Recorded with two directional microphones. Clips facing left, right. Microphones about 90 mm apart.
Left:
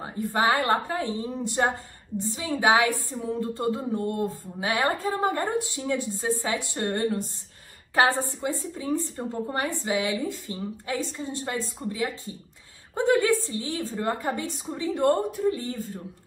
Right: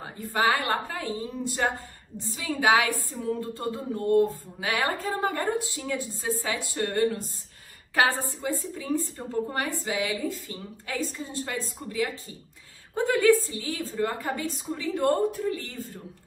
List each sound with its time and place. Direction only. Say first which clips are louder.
0.0 s a woman's voice: left 1 dB; 25° left (ahead or behind)